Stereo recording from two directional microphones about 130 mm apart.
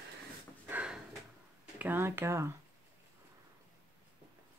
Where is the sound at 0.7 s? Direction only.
10° right (ahead or behind).